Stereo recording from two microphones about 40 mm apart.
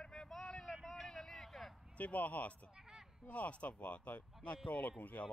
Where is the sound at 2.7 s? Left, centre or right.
Centre.